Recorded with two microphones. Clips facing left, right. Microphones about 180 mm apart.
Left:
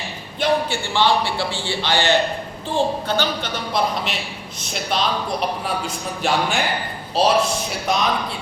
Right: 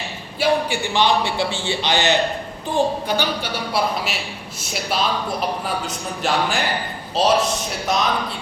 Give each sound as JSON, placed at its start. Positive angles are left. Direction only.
{"t": 0.3, "sound": "a man's voice", "side_deg": -10}